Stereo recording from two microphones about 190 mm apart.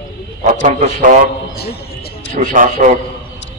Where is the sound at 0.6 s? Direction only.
40° right (ahead or behind).